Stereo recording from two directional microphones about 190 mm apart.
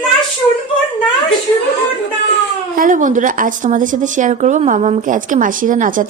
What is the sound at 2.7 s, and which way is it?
A woman's voice, 45° right (ahead or behind).